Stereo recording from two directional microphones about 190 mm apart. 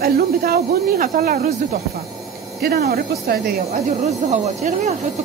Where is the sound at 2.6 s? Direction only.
55° right (ahead or behind).